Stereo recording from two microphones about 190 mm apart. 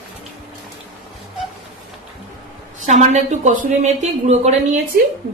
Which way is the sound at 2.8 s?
35° right (ahead or behind).